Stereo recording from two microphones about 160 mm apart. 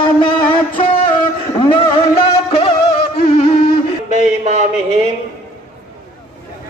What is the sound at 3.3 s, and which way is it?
Music, 40° left (ahead or behind).